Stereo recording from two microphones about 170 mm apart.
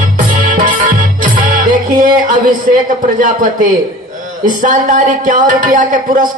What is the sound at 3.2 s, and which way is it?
Speech, 50° right (ahead or behind).